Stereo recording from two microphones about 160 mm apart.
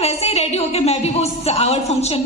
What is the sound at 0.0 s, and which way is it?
A woman's voice, 40° left (ahead or behind).